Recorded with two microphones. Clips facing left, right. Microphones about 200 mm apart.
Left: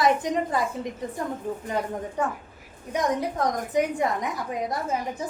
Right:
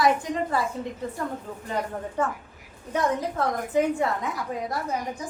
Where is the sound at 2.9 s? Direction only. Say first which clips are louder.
Even; 15° left (ahead or behind).